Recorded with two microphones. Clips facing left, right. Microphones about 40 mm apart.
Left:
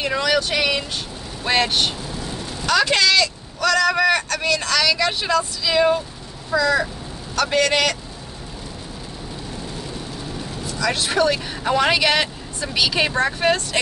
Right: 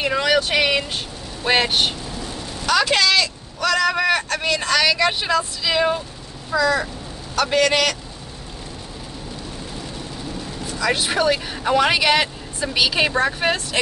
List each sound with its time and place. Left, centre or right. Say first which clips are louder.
0.0 s speech: right 1 dB; centre
2.6 s a man's voice: even; centre
10.8 s speech: even; centre